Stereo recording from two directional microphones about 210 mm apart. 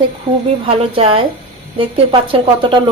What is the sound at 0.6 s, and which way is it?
Speech, 25° right (ahead or behind).